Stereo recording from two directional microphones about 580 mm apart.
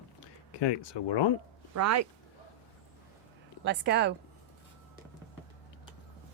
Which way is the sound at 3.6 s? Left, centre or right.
Centre.